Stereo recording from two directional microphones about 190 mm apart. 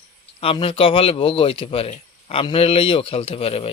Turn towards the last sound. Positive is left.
turn(degrees=30)  # may be behind; listen again after turning